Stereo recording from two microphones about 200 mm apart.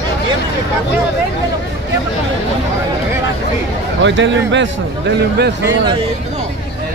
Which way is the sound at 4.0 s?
65° right (ahead or behind).